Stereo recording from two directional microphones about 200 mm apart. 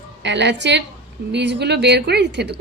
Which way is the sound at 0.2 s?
60° right (ahead or behind).